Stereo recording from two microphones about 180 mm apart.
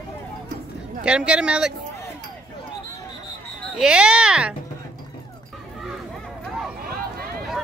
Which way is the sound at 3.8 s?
5° right (ahead or behind).